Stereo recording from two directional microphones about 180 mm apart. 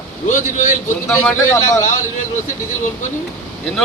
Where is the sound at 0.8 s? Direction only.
15° left (ahead or behind).